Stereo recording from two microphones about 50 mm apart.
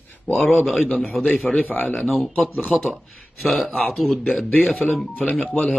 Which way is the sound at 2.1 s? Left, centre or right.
Centre.